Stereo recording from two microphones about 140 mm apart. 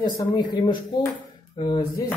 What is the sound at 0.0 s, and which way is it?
Speech, 30° left (ahead or behind).